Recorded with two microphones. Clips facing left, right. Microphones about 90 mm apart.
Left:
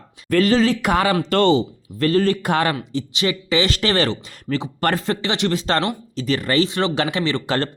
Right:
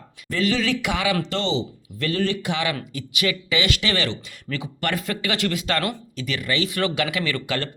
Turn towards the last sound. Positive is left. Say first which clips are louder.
# left 5 dB
turn(degrees=35)  # may be behind; listen again after turning